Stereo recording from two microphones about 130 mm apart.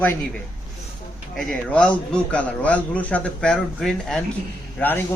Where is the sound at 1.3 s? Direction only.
5° left (ahead or behind).